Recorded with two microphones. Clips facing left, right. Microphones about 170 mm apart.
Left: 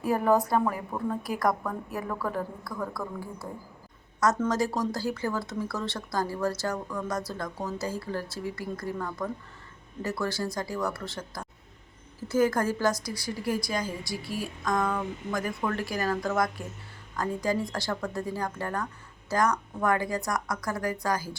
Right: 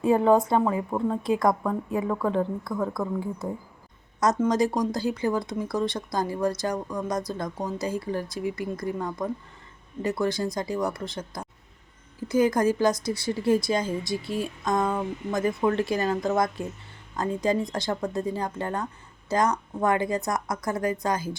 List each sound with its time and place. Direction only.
0.0 s a woman's voice: 25° right (ahead or behind)